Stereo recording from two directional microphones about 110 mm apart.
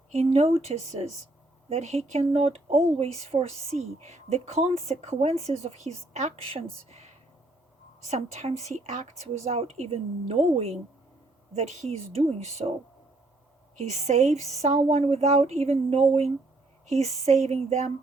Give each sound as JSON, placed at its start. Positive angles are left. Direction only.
{"t": 0.1, "sound": "a woman's voice", "side_deg": -75}
{"t": 2.1, "sound": "speech", "side_deg": -70}
{"t": 6.8, "sound": "a sound", "side_deg": -80}
{"t": 8.0, "sound": "a woman's voice", "side_deg": -90}
{"t": 11.5, "sound": "a woman's voice", "side_deg": -90}
{"t": 13.7, "sound": "a woman's voice", "side_deg": -90}
{"t": 16.8, "sound": "speech", "side_deg": -85}